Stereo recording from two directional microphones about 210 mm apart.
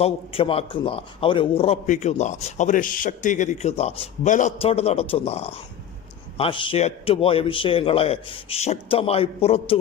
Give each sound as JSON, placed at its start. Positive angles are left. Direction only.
{"t": 0.0, "sound": "a man's voice", "side_deg": 25}